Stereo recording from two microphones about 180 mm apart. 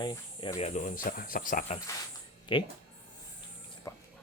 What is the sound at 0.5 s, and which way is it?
Speech, 40° left (ahead or behind).